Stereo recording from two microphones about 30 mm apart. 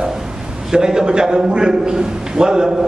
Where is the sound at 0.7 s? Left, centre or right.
Right.